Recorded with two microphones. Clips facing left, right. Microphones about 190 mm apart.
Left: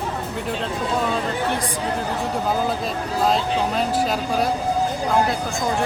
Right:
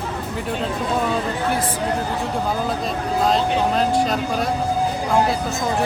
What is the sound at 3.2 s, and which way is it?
Speech, centre (ahead or behind).